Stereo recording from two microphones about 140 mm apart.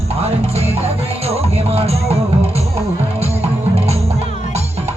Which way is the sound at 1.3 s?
45° right (ahead or behind).